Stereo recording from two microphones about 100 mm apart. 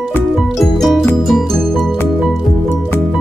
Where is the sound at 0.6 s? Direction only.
Centre (ahead or behind).